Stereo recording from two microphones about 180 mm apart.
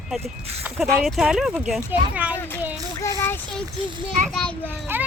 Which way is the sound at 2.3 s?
10° left (ahead or behind).